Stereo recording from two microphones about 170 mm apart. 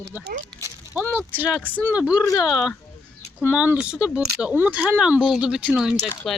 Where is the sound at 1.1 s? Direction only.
10° right (ahead or behind).